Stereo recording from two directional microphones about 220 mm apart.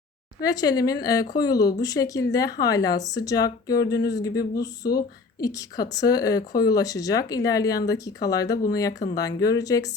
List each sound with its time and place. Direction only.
0.4 s a woman's voice: 15° left (ahead or behind)